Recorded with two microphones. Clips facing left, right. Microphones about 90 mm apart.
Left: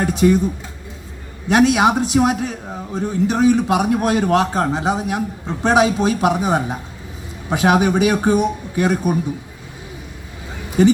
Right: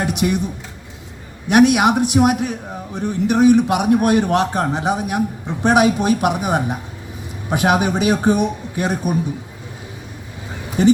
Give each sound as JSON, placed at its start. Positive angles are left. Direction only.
{"t": 0.0, "sound": "speech", "side_deg": -20}
{"t": 1.5, "sound": "a man's voice", "side_deg": -15}